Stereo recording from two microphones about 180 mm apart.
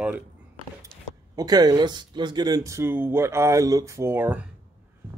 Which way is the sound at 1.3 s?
20° right (ahead or behind).